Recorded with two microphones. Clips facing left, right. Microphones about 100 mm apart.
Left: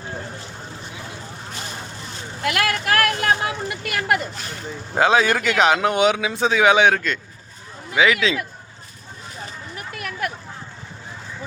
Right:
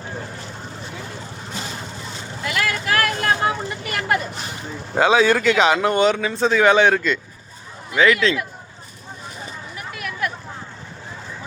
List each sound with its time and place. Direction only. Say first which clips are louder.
2.4 s vehicle: left 2 dB; 60° left (ahead or behind)
4.9 s speech: right 2 dB; centre (ahead or behind)
9.7 s vehicle: even; 50° left (ahead or behind)